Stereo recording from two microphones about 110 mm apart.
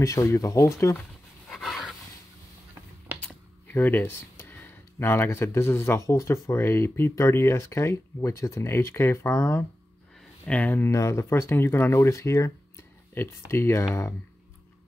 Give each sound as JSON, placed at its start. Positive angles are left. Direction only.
{"t": 0.0, "sound": "speech", "side_deg": 30}
{"t": 1.5, "sound": "dog", "side_deg": 0}
{"t": 3.2, "sound": "speech", "side_deg": 15}
{"t": 10.4, "sound": "speech", "side_deg": 15}
{"t": 10.9, "sound": "speech", "side_deg": 25}